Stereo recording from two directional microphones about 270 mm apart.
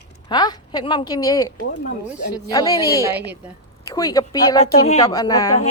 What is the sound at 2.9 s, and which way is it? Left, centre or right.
Speech, centre.